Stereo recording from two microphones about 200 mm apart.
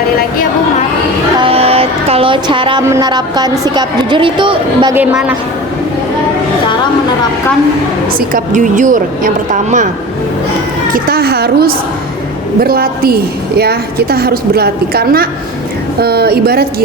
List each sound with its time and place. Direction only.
1.4 s music: 30° right (ahead or behind)
2.9 s speech: 20° right (ahead or behind)
8.3 s a woman's voice: 40° right (ahead or behind)
10.9 s a woman's voice: 50° right (ahead or behind)